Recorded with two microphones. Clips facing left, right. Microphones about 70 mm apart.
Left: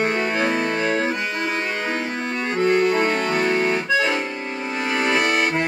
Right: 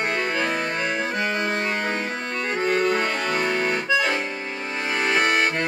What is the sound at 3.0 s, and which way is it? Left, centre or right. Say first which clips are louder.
Accordion: left 4 dB; centre.